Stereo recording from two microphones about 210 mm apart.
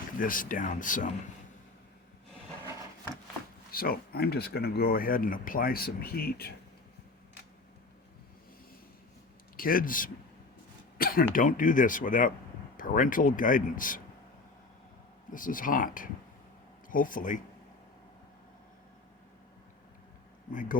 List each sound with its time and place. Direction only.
0.2 s speech: 40° left (ahead or behind)
3.7 s speech: 45° left (ahead or behind)
9.6 s speech: 40° left (ahead or behind)
15.3 s speech: 40° left (ahead or behind)
20.5 s speech: 40° left (ahead or behind)